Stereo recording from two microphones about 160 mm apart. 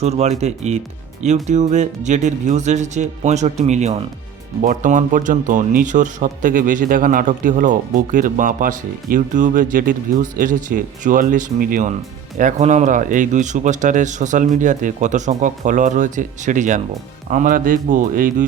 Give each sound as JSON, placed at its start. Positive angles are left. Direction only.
{"t": 0.0, "sound": "speech", "side_deg": -40}
{"t": 4.6, "sound": "speech", "side_deg": -55}